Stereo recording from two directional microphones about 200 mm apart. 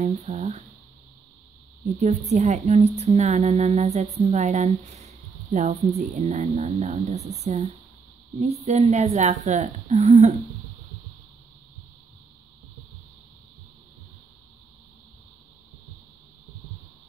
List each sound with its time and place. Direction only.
0.0 s a woman's voice: 35° right (ahead or behind)
2.0 s a woman's voice: 35° right (ahead or behind)
8.4 s a woman's voice: 35° right (ahead or behind)